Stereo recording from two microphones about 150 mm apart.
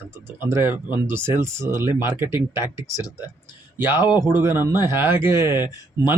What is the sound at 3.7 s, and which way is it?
Speech, 15° right (ahead or behind).